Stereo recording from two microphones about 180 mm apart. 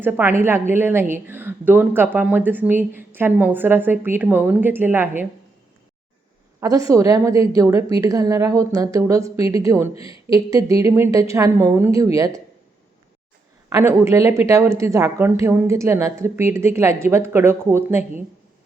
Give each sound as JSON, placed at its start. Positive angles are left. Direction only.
{"t": 0.0, "sound": "a woman's voice", "side_deg": -10}
{"t": 6.6, "sound": "a woman's voice", "side_deg": -20}
{"t": 9.9, "sound": "a woman's voice", "side_deg": 30}
{"t": 10.3, "sound": "a woman's voice", "side_deg": -20}
{"t": 13.7, "sound": "a woman's voice", "side_deg": -15}